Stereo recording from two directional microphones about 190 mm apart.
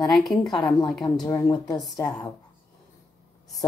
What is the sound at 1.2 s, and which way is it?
A woman's voice, 20° left (ahead or behind).